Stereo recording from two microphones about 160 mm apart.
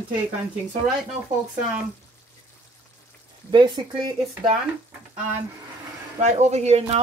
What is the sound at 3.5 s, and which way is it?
Speech, 30° right (ahead or behind).